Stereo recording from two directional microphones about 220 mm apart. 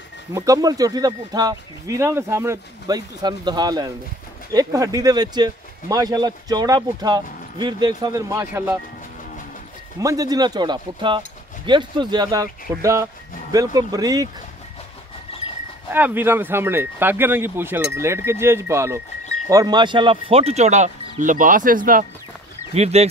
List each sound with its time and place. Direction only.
0.3 s speech: 15° right (ahead or behind)
9.9 s speech: 15° right (ahead or behind)
15.9 s speech: 10° right (ahead or behind); by 22.0 s 40° right (ahead or behind)
22.8 s speech: 30° right (ahead or behind)